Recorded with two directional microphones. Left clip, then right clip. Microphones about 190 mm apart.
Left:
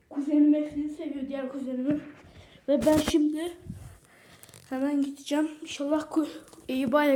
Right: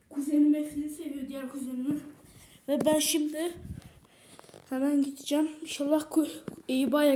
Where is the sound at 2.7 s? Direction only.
70° right (ahead or behind).